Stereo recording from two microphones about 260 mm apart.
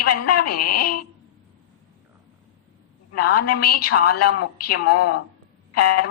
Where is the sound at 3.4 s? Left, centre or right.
Left.